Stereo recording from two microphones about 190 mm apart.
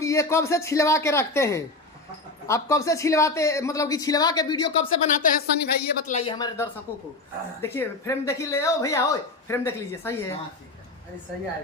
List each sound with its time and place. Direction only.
0.0 s speech: 15° left (ahead or behind)
5.0 s a woman's voice: 45° left (ahead or behind)
6.1 s speech: 25° left (ahead or behind)